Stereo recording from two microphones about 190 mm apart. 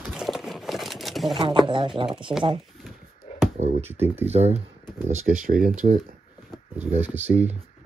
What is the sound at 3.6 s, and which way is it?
Speech, 35° right (ahead or behind).